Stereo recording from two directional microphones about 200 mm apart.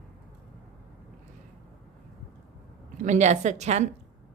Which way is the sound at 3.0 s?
35° right (ahead or behind).